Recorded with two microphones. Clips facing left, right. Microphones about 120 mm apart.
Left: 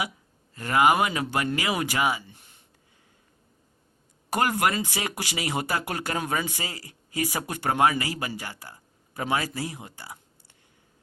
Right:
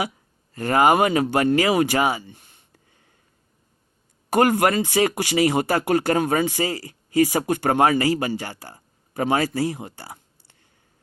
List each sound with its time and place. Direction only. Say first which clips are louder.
0.5 s speech: right 4 dB; 40° right (ahead or behind)
4.3 s speech: right 6 dB; 50° right (ahead or behind)
4.8 s speech: right 10 dB; 40° right (ahead or behind)
9.2 s speech: right 7 dB; 50° right (ahead or behind)